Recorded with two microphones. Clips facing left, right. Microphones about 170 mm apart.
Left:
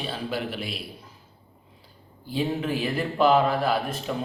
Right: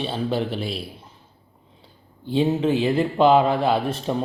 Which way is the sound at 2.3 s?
25° right (ahead or behind).